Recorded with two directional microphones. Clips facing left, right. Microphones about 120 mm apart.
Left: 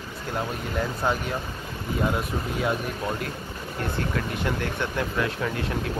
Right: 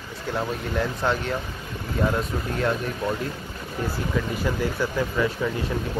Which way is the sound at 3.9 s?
5° right (ahead or behind).